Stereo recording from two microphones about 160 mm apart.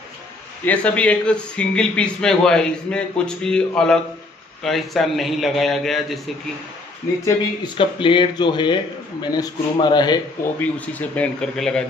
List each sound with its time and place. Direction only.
0.7 s a man's voice: 10° left (ahead or behind)
7.2 s speech: 30° left (ahead or behind)
10.6 s speech: 10° left (ahead or behind)